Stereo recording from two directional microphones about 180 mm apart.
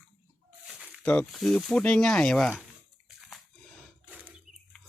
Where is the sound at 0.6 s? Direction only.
5° right (ahead or behind).